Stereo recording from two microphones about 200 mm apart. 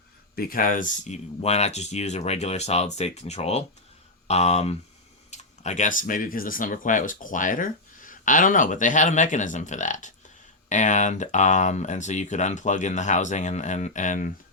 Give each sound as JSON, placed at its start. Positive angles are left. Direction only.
{"t": 0.3, "sound": "speech", "side_deg": 45}